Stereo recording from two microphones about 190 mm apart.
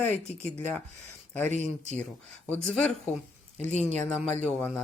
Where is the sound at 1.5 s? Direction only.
35° right (ahead or behind).